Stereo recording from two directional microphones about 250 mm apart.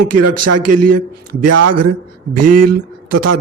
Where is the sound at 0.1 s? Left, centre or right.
Right.